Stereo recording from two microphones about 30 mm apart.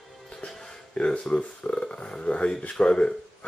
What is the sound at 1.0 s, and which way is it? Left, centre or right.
Speech, left.